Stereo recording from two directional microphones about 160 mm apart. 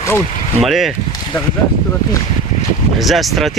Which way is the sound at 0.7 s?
Centre (ahead or behind).